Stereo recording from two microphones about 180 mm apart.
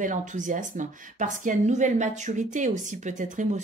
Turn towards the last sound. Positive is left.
turn(degrees=-45)  # may be behind; listen again after turning